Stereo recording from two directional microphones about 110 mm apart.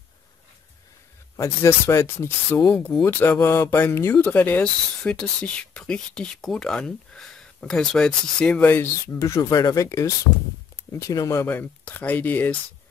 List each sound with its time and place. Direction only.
1.3 s speech: 25° left (ahead or behind)